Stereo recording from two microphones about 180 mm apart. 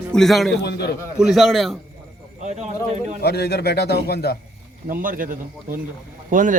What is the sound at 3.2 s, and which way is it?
A man's voice, 65° left (ahead or behind).